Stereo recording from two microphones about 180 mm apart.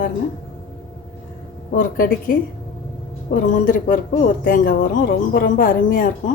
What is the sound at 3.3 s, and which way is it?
A woman's voice, 50° left (ahead or behind).